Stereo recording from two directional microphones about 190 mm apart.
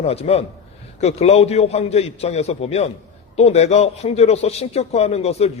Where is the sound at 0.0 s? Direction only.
30° left (ahead or behind).